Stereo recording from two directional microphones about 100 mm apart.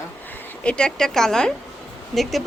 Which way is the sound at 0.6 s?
10° left (ahead or behind).